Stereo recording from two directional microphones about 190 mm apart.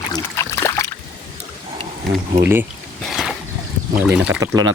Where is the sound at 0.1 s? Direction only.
15° left (ahead or behind).